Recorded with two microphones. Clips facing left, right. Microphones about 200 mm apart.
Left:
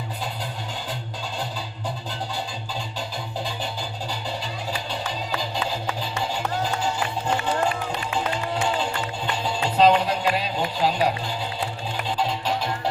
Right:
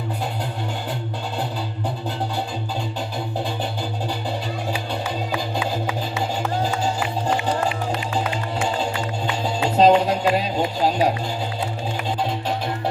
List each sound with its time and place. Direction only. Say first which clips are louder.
9.6 s music: right 3 dB; 45° right (ahead or behind)
12.2 s music: left 1 dB; 55° right (ahead or behind)